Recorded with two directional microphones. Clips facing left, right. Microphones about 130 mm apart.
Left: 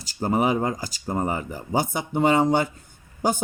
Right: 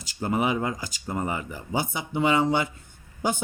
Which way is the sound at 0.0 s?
35° left (ahead or behind).